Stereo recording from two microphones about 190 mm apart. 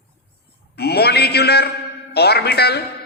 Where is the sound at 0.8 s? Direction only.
60° left (ahead or behind).